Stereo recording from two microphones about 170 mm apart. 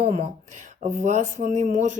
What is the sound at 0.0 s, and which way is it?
Speech, 40° right (ahead or behind).